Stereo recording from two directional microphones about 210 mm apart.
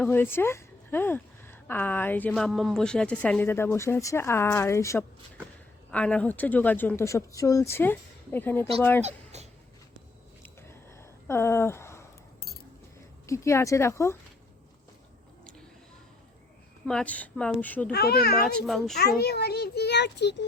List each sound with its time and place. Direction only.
0.0 s speech: 10° left (ahead or behind)
9.0 s a sound: 30° right (ahead or behind)
10.4 s a sound: 10° left (ahead or behind)
13.2 s speech: 15° left (ahead or behind)
16.8 s speech: 5° left (ahead or behind)
17.9 s a child's voice: 50° left (ahead or behind)
18.4 s speech: centre (ahead or behind)
18.9 s a child's voice: 50° left (ahead or behind)